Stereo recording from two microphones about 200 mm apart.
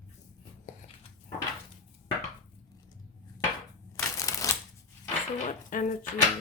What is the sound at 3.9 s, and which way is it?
Shuffling cards, 15° left (ahead or behind).